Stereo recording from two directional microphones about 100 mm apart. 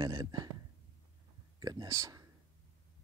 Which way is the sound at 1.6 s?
40° right (ahead or behind).